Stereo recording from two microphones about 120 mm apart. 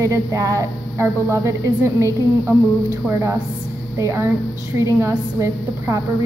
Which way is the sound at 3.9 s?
25° right (ahead or behind).